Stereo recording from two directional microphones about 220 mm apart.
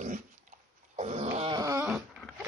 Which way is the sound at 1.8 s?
Centre (ahead or behind).